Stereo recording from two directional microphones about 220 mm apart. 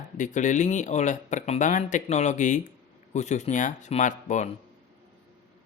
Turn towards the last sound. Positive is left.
turn(degrees=35)  # may be behind; listen again after turning